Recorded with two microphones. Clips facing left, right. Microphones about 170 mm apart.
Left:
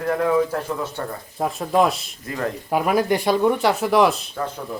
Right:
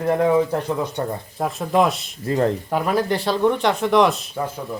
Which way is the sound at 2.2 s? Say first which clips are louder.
Right 7 dB; 30° right (ahead or behind).